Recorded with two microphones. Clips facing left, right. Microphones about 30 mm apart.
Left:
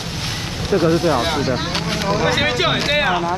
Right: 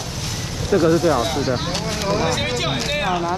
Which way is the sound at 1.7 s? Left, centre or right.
Left.